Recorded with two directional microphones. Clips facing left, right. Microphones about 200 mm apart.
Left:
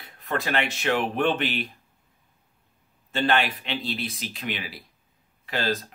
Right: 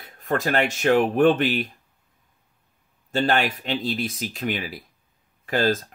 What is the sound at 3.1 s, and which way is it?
Speech, 40° right (ahead or behind).